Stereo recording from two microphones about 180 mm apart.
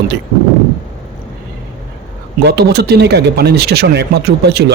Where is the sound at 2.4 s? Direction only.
65° right (ahead or behind).